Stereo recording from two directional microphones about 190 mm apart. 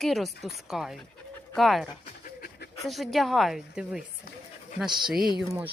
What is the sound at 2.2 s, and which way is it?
Pant, 50° left (ahead or behind).